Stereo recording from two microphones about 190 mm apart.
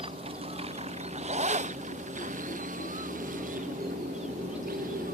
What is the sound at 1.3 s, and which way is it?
Zipper, 35° right (ahead or behind).